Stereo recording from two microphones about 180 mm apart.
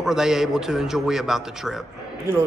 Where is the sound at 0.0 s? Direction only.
Centre (ahead or behind).